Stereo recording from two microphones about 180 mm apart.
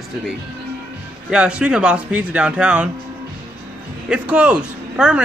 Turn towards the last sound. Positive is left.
turn(degrees=-5)  # may be behind; listen again after turning